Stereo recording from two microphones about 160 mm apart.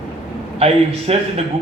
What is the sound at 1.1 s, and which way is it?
Speech, 40° right (ahead or behind).